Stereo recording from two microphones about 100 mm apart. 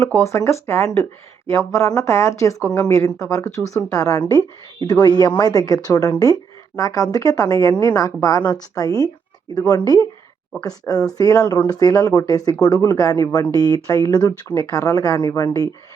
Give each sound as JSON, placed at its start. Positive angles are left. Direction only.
{"t": 0.0, "sound": "speech", "side_deg": 30}